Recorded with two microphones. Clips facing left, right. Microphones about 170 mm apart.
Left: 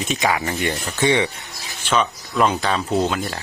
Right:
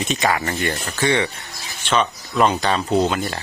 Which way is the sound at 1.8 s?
10° left (ahead or behind).